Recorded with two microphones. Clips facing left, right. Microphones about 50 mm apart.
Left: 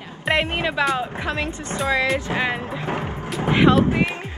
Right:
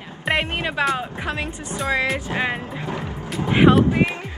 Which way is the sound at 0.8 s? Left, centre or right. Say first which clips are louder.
Left 1 dB; centre.